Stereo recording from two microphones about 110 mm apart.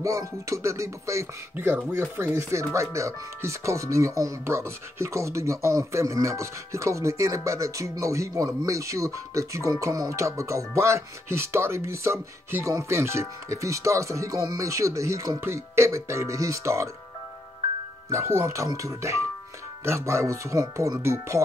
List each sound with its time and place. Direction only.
0.0 s speech: 30° right (ahead or behind)
18.1 s speech: 25° right (ahead or behind)